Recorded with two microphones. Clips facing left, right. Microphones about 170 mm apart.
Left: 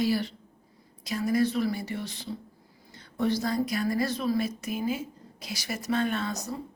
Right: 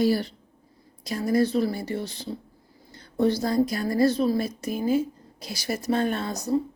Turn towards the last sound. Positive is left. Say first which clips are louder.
# right 6 dB
turn(degrees=-35)  # may be behind; listen again after turning